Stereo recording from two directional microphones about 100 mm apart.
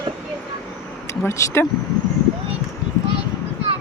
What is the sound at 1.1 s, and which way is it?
Speech, 25° left (ahead or behind).